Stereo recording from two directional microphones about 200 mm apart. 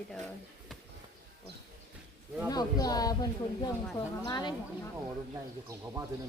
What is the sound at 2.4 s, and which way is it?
Speech, 20° left (ahead or behind).